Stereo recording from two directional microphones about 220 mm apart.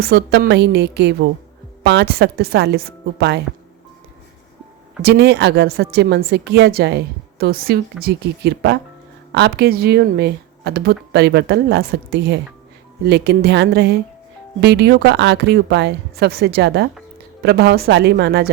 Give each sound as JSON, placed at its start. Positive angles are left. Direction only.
{"t": 0.0, "sound": "a woman's voice", "side_deg": -45}
{"t": 5.0, "sound": "a woman's voice", "side_deg": -50}